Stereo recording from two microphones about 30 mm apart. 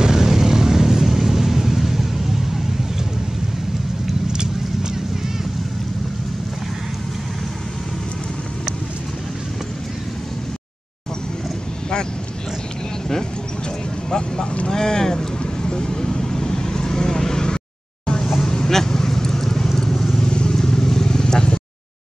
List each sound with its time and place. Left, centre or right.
0.0 s vehicle: centre
14.1 s vehicle: left
20.2 s vehicle: left
20.5 s vehicle: centre